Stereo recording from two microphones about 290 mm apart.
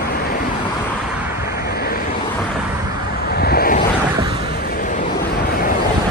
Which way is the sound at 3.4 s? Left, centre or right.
Left.